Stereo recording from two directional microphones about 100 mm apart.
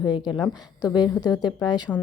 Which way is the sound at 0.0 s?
45° left (ahead or behind).